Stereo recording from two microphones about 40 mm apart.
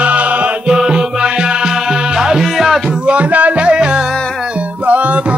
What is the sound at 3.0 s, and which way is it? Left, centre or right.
Music, right.